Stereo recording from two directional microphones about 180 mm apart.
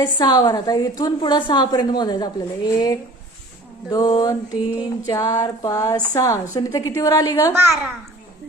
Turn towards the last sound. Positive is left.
turn(degrees=-15)  # may be behind; listen again after turning